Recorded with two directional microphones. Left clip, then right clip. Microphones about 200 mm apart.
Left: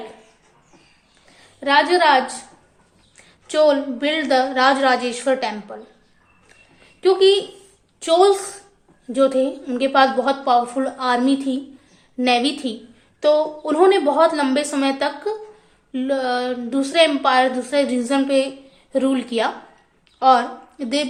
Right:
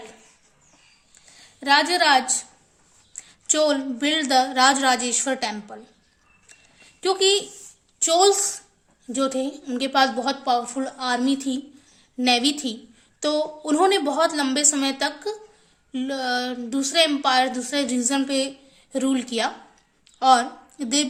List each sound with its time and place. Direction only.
1.6 s a woman's voice: 35° right (ahead or behind)
7.0 s a woman's voice: 35° right (ahead or behind)